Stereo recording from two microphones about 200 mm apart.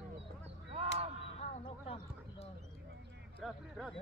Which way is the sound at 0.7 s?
35° right (ahead or behind).